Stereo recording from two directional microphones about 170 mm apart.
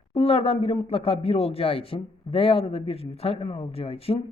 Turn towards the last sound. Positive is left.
turn(degrees=35)  # may be behind; listen again after turning